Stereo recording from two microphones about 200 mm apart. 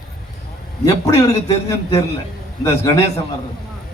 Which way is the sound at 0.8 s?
15° left (ahead or behind).